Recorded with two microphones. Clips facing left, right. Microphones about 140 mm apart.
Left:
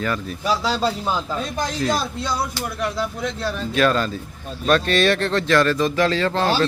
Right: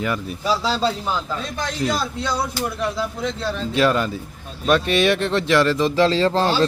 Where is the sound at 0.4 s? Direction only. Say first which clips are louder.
Even; centre (ahead or behind).